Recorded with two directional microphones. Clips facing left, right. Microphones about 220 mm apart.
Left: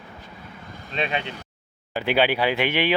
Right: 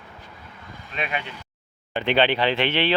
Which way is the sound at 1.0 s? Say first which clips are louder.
Left 3 dB; 30° left (ahead or behind).